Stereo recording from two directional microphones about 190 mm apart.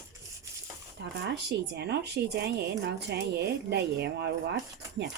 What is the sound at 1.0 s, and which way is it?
Speech, 65° right (ahead or behind).